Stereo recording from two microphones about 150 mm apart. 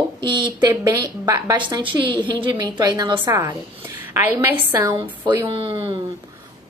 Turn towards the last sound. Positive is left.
turn(degrees=-35)  # may be behind; listen again after turning